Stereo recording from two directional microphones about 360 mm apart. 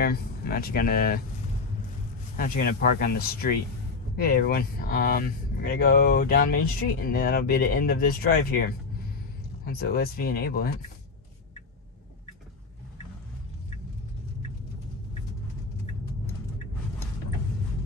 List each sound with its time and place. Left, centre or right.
0.0 s speech: left
2.3 s speech: left